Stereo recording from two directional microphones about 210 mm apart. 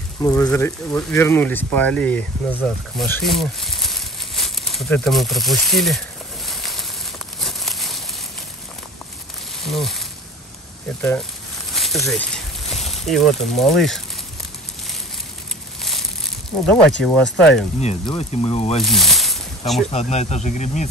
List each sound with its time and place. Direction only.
0.2 s speech: 15° left (ahead or behind)
7.3 s crumpling: centre (ahead or behind)
9.7 s speech: centre (ahead or behind)
11.7 s a sound: centre (ahead or behind)
12.7 s speech: centre (ahead or behind)
15.8 s a sound: centre (ahead or behind)
16.6 s speech: 5° left (ahead or behind)
17.7 s speech: 30° left (ahead or behind)
18.8 s speech: centre (ahead or behind)
19.9 s speech: 30° left (ahead or behind)